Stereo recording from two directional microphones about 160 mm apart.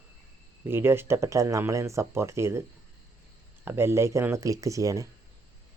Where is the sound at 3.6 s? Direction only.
15° right (ahead or behind).